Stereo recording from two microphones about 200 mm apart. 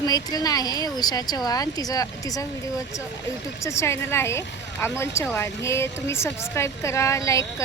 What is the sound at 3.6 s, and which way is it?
Speech, 15° left (ahead or behind).